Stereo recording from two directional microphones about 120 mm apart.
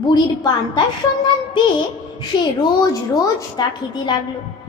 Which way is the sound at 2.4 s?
35° left (ahead or behind).